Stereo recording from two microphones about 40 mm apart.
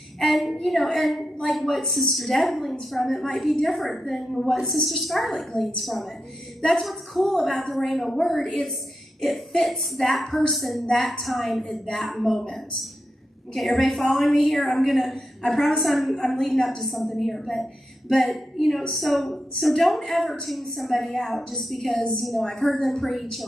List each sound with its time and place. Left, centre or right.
0.2 s a sound: centre
0.9 s a woman's voice: centre
8.4 s a woman's voice: centre
9.6 s a woman's voice: centre